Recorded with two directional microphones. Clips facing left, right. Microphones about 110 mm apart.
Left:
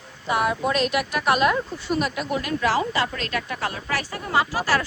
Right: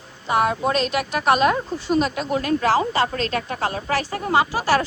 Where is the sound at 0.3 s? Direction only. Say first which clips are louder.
Right 3 dB; 30° right (ahead or behind).